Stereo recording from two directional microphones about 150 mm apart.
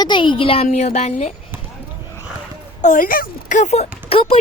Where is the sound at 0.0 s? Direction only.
30° left (ahead or behind).